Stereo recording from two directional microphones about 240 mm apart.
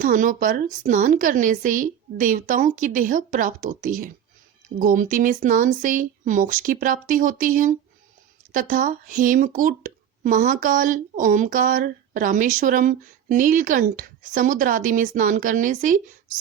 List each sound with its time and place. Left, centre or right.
0.0 s speech: right